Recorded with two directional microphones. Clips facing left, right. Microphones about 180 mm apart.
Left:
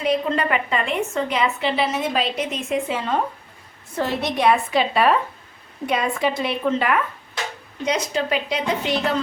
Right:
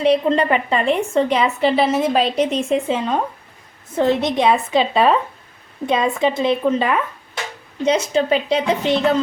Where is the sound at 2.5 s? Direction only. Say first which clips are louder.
Right 5 dB; 25° right (ahead or behind).